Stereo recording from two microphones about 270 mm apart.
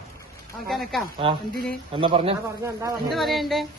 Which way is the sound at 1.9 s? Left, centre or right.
Centre.